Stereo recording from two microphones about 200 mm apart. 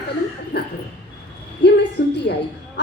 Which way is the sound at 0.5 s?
55° left (ahead or behind).